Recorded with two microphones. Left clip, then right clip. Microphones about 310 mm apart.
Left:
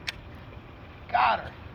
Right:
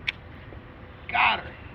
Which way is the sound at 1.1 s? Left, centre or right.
Left.